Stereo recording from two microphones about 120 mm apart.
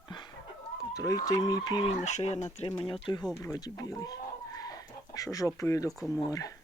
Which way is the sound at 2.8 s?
50° left (ahead or behind).